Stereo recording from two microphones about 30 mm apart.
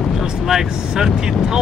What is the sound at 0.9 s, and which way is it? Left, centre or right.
Speech, right.